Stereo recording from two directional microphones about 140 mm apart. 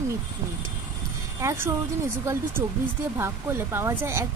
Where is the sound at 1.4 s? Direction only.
20° right (ahead or behind).